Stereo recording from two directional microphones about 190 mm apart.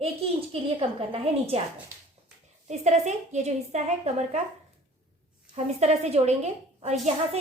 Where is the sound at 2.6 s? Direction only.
35° right (ahead or behind).